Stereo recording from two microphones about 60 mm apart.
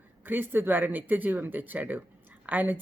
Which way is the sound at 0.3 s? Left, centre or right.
Right.